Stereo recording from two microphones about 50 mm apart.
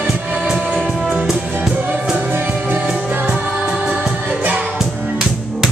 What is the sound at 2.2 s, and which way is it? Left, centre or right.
Music, right.